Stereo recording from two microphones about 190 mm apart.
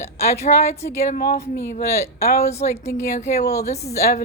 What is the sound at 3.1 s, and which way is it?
Speech, 40° left (ahead or behind).